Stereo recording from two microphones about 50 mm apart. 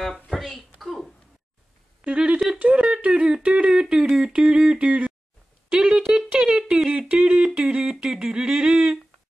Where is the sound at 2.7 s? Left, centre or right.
Right.